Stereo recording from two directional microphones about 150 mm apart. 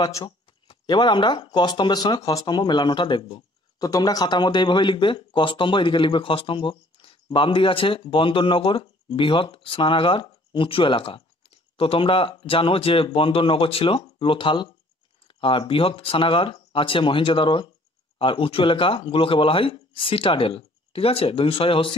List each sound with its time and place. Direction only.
0.0 s speech: 25° left (ahead or behind)
15.2 s a sound: 35° left (ahead or behind)
15.7 s speech: 35° left (ahead or behind)